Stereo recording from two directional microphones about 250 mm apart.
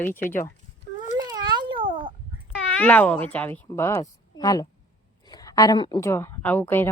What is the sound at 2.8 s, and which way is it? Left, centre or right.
A woman's voice, centre.